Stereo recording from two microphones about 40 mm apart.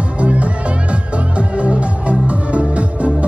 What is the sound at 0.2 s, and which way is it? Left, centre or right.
Music, right.